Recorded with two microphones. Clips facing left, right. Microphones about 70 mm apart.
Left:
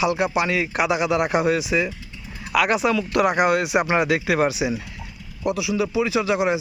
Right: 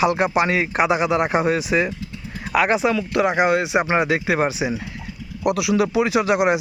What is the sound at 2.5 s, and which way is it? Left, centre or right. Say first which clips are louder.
Speech: right 1 dB; right.